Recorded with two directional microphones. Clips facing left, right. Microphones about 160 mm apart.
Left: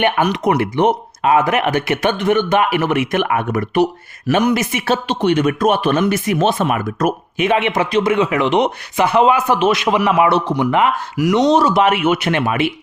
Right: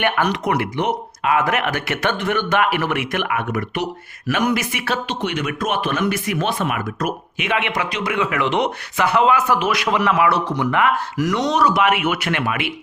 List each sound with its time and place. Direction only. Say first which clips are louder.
0.4 s a man's voice: left 6 dB; 20° left (ahead or behind)
1.5 s a man's voice: left 5 dB; 20° left (ahead or behind); by 7.5 s 40° left (ahead or behind)
7.5 s a man's voice: left 6 dB; 25° left (ahead or behind)